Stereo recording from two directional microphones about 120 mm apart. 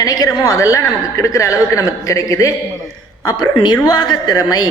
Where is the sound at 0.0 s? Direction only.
30° left (ahead or behind).